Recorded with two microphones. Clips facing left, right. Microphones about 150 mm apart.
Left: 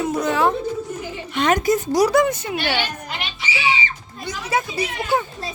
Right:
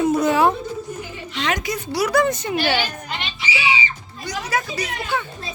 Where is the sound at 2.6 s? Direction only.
5° right (ahead or behind).